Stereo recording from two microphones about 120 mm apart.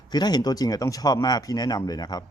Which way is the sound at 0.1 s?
35° left (ahead or behind).